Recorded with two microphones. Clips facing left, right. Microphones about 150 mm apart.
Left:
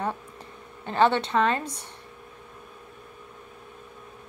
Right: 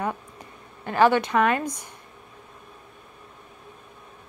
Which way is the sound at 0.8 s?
25° left (ahead or behind).